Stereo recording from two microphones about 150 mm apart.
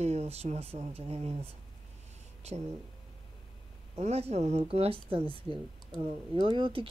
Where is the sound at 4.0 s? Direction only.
45° right (ahead or behind).